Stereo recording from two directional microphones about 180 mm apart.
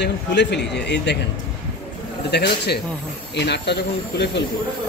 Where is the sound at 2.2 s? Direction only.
65° left (ahead or behind).